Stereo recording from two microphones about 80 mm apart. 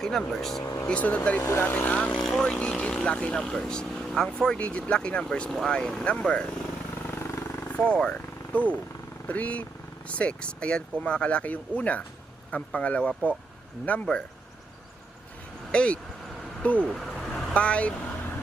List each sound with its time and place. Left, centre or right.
0.0 s speech: centre
0.6 s speech: left
0.9 s speech: centre
7.1 s vehicle: left
7.7 s speech: centre
8.1 s vehicle: centre
9.2 s speech: centre
15.7 s speech: centre
16.9 s vehicle: centre
17.5 s vehicle: centre